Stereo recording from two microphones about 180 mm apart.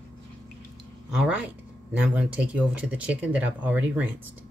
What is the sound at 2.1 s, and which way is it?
Speech, 5° right (ahead or behind).